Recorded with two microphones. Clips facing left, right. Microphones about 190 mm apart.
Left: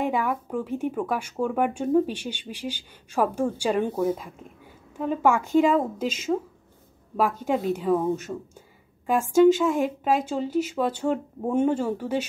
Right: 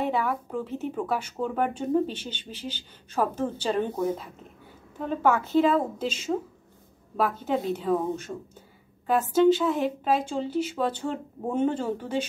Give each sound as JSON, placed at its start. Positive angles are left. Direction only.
{"t": 0.1, "sound": "speech", "side_deg": 10}